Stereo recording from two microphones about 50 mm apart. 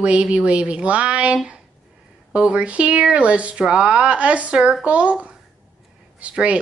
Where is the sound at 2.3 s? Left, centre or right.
Right.